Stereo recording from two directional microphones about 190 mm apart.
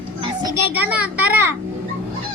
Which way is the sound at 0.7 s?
10° right (ahead or behind).